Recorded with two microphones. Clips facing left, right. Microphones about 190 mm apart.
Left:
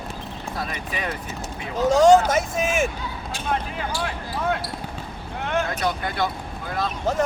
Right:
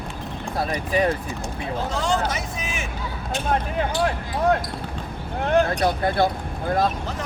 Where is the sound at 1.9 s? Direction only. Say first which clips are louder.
Left 11 dB; 45° left (ahead or behind).